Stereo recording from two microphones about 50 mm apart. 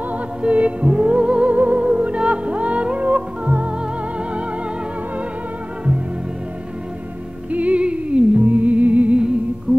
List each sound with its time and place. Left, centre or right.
0.1 s music: right
7.5 s music: right